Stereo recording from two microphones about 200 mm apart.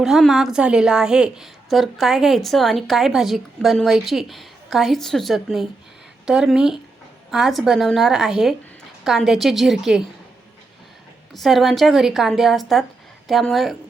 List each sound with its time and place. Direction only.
0.0 s a woman's voice: centre (ahead or behind)
11.3 s a woman's voice: centre (ahead or behind)